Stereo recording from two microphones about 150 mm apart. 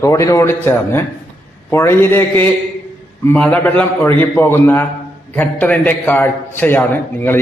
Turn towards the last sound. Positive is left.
turn(degrees=15)  # may be behind; listen again after turning